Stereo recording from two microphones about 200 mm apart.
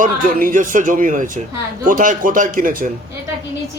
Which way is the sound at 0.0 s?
45° right (ahead or behind).